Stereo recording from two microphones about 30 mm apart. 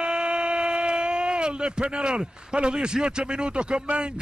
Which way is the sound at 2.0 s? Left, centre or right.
Right.